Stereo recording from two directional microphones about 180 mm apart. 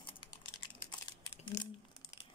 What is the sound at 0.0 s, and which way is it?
Typing, 25° left (ahead or behind).